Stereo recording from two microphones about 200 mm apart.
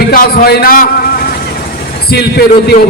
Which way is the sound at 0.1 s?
45° left (ahead or behind).